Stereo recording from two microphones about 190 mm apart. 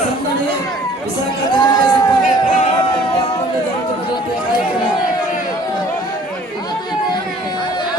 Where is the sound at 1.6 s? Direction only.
20° left (ahead or behind).